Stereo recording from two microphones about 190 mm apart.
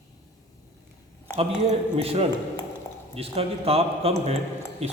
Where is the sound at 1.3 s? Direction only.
35° right (ahead or behind).